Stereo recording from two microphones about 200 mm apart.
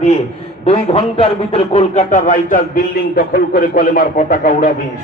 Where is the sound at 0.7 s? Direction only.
30° left (ahead or behind).